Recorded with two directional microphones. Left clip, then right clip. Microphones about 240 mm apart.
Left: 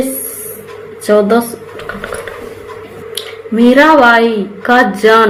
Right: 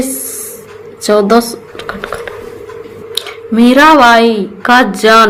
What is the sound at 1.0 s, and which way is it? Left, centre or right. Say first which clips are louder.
Speech: right 1 dB; right.